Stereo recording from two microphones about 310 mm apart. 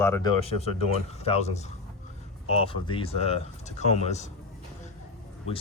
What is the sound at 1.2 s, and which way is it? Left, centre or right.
Speech, left.